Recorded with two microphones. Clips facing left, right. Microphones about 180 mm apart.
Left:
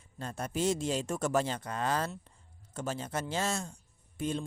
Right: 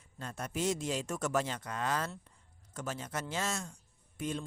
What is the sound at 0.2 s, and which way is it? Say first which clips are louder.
Speech: left 3 dB; 30° left (ahead or behind).